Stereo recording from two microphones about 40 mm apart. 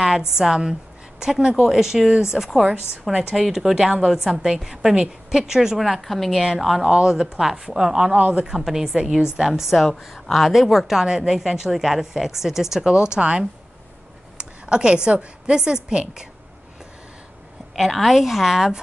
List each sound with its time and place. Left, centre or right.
0.4 s a woman's voice: centre
2.7 s a woman's voice: right
3.3 s a woman's voice: centre
4.9 s a woman's voice: centre
5.8 s a woman's voice: centre
6.9 s a woman's voice: centre
9.8 s a woman's voice: centre; by 13.4 s right
14.4 s a woman's voice: right
17.7 s a woman's voice: centre